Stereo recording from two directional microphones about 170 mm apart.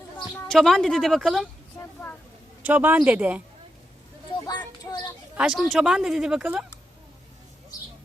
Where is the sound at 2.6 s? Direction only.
10° right (ahead or behind).